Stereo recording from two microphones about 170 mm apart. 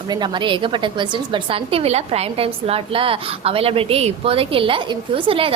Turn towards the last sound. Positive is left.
turn(degrees=-30)  # may be behind; listen again after turning